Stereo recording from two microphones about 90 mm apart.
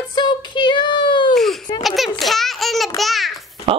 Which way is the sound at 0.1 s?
55° left (ahead or behind).